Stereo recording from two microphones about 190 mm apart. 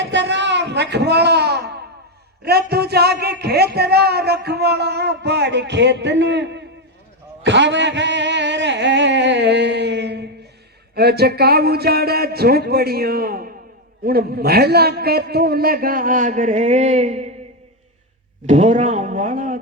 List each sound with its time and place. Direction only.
0.0 s music: 65° right (ahead or behind)
2.4 s a man's voice: 55° right (ahead or behind)
7.4 s a sound: 70° right (ahead or behind)
10.9 s a man's voice: 55° right (ahead or behind); by 17.2 s 35° right (ahead or behind)
18.4 s speech: 35° right (ahead or behind)